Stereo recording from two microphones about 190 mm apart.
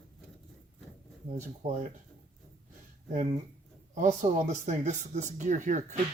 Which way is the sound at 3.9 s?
40° right (ahead or behind).